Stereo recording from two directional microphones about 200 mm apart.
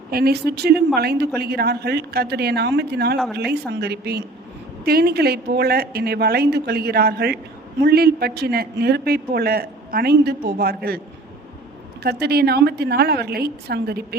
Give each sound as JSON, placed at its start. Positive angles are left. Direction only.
{"t": 0.1, "sound": "a man's voice", "side_deg": -50}
{"t": 12.0, "sound": "a man's voice", "side_deg": -55}